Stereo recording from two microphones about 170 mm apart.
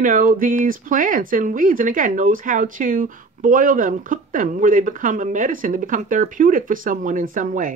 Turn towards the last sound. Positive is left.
turn(degrees=-50)  # may be behind; listen again after turning